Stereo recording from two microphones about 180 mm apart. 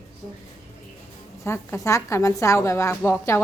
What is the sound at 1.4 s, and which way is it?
A woman's voice, 15° left (ahead or behind).